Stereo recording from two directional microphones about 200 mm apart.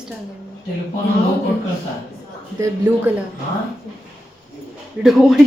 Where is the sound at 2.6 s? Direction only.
10° right (ahead or behind).